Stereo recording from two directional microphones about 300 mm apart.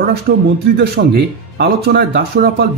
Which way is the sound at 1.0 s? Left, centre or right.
Right.